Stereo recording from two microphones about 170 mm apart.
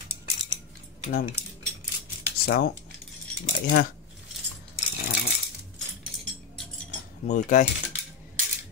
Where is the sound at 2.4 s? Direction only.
65° left (ahead or behind).